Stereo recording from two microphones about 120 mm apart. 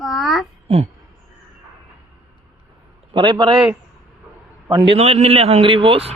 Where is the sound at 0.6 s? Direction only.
60° right (ahead or behind).